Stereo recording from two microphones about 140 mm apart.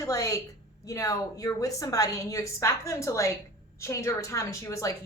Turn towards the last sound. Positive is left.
turn(degrees=20)  # may be behind; listen again after turning